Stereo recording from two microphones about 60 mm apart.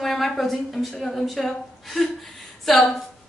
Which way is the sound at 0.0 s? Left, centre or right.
Centre.